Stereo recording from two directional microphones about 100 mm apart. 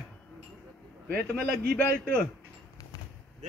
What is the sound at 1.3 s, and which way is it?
Speech, 10° left (ahead or behind).